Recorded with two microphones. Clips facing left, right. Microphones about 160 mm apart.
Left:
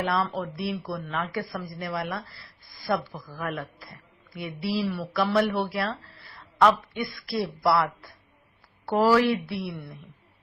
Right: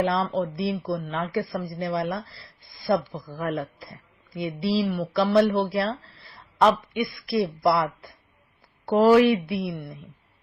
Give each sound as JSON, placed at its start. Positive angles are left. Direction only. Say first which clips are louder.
{"t": 0.0, "sound": "speech", "louder": "right 4 dB", "side_deg": -25}